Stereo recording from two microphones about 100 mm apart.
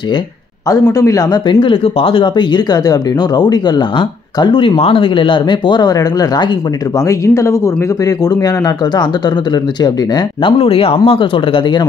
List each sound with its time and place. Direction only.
0.9 s speech: 35° left (ahead or behind)
1.6 s speech: 65° left (ahead or behind); by 3.8 s 45° left (ahead or behind)
4.4 s speech: 55° left (ahead or behind)
7.1 s speech: 30° left (ahead or behind)
10.4 s speech: 70° left (ahead or behind)
11.1 s speech: 60° left (ahead or behind)